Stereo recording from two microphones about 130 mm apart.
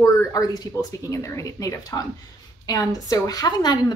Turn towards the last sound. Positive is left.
turn(degrees=30)  # may be behind; listen again after turning